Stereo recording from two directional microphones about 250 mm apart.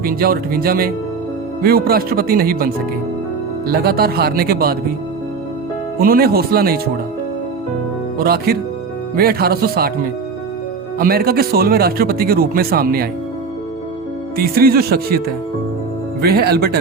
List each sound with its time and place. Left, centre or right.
0.0 s speech: right
6.0 s speech: right
8.2 s speech: right
14.3 s speech: right
16.2 s speech: right